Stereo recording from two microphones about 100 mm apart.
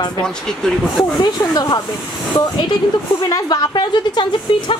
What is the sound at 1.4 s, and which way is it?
Speech, 40° left (ahead or behind).